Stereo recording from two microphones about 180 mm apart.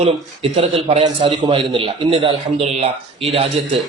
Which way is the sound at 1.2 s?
25° right (ahead or behind).